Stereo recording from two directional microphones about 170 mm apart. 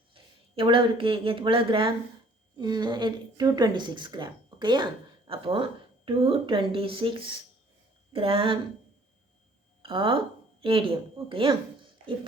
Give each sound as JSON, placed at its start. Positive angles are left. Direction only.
{"t": 0.1, "sound": "a woman's voice", "side_deg": -30}
{"t": 9.8, "sound": "a woman's voice", "side_deg": -30}